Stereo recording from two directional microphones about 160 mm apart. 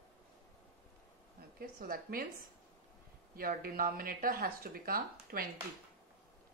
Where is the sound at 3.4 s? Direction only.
65° right (ahead or behind).